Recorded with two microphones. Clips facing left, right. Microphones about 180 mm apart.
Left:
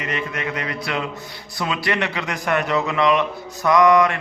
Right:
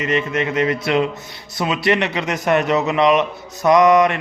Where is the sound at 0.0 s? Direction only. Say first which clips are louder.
Right 6 dB; 20° right (ahead or behind).